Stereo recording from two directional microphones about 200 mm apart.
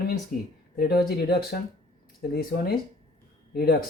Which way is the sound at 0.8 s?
50° left (ahead or behind).